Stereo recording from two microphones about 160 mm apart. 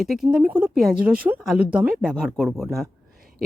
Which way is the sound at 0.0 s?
Centre (ahead or behind).